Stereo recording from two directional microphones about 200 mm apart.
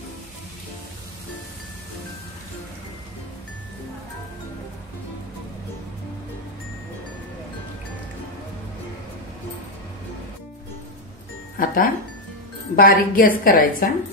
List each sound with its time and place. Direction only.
11.5 s music: 45° left (ahead or behind)
12.7 s a woman's voice: 45° left (ahead or behind)